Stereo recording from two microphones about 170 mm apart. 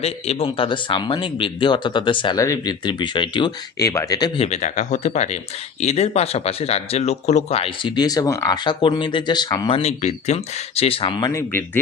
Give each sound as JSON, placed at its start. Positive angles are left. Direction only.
{"t": 0.0, "sound": "speech", "side_deg": 35}
{"t": 4.4, "sound": "speech", "side_deg": 40}